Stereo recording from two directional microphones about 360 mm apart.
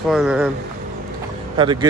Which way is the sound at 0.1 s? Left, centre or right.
Centre.